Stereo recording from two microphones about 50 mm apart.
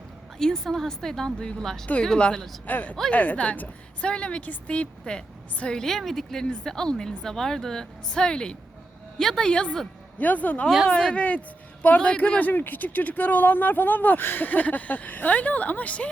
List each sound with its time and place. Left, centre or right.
0.3 s speech: centre
2.6 s a woman's voice: left
5.7 s a woman's voice: centre
10.2 s speech: left
10.8 s a woman's voice: centre